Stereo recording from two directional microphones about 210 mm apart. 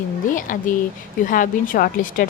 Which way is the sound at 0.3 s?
40° left (ahead or behind).